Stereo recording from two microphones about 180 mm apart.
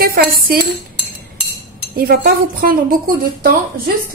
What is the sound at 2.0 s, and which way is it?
Speech, 55° right (ahead or behind).